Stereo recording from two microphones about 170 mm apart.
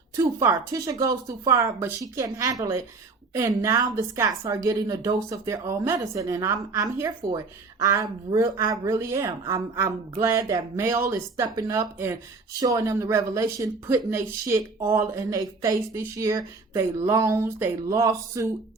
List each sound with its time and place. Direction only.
0.2 s speech: 20° right (ahead or behind)